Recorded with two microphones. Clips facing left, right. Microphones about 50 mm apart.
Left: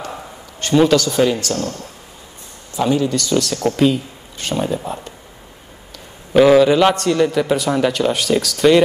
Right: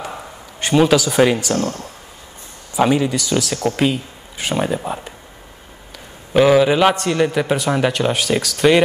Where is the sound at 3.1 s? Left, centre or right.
Centre.